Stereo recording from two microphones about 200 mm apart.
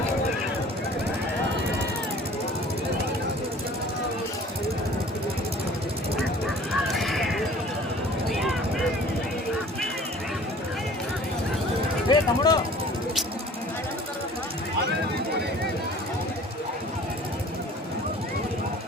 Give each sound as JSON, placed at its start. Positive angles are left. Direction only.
{"t": 6.8, "sound": "a sound", "side_deg": 0}
{"t": 8.3, "sound": "vehicle", "side_deg": 0}
{"t": 12.0, "sound": "vehicle", "side_deg": 20}